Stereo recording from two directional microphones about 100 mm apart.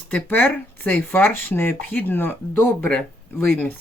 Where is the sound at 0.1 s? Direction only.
20° left (ahead or behind).